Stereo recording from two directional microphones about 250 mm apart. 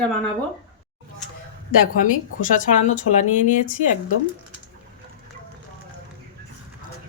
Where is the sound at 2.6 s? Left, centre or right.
Left.